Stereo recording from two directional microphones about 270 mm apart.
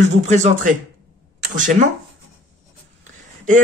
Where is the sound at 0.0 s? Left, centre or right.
Right.